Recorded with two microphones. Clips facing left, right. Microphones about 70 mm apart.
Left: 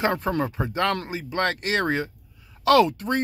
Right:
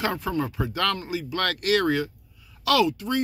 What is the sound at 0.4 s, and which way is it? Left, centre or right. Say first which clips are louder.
Speech: left 2 dB; left.